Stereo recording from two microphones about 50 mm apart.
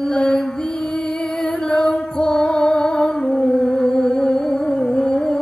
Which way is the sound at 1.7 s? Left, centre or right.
Centre.